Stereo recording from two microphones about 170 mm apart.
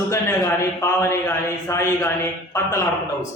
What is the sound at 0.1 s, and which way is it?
A man's voice, 15° left (ahead or behind).